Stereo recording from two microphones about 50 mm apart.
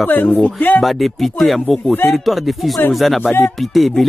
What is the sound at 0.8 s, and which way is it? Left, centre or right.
Speech, centre.